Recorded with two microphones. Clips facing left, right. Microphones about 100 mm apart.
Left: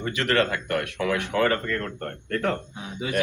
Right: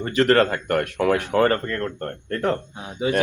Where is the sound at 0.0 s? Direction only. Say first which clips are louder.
Right 6 dB; 40° right (ahead or behind).